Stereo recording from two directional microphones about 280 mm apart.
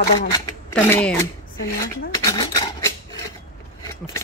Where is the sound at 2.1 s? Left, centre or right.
Centre.